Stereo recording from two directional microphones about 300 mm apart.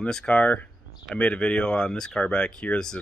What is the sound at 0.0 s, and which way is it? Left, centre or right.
Speech, centre.